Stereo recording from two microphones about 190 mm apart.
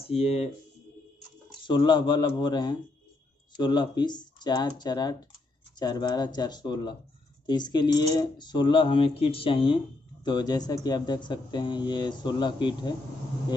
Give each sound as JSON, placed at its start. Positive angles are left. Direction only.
{"t": 0.0, "sound": "speech", "side_deg": 35}
{"t": 1.7, "sound": "speech", "side_deg": 25}